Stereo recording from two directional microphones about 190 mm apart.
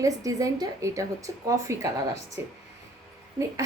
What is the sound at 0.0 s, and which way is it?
A woman's voice, 15° right (ahead or behind).